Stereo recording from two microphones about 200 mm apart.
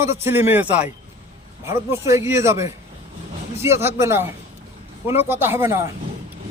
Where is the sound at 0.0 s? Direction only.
10° right (ahead or behind).